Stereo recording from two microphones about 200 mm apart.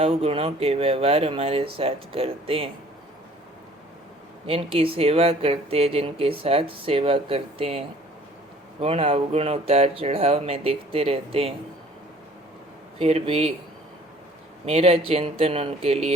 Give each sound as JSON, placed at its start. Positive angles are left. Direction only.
{"t": 0.0, "sound": "speech", "side_deg": -30}
{"t": 4.4, "sound": "speech", "side_deg": -25}
{"t": 13.0, "sound": "speech", "side_deg": -30}
{"t": 14.7, "sound": "speech", "side_deg": -30}